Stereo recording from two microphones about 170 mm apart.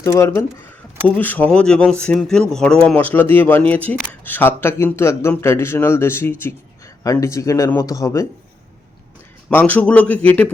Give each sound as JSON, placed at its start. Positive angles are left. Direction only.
{"t": 0.0, "sound": "a man's voice", "side_deg": 15}
{"t": 9.5, "sound": "a man's voice", "side_deg": 10}